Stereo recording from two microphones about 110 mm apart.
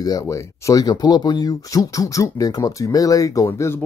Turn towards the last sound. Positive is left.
turn(degrees=30)  # may be behind; listen again after turning